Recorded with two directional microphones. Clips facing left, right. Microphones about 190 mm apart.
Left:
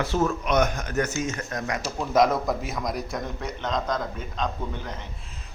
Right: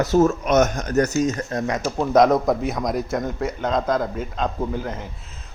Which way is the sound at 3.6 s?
55° right (ahead or behind).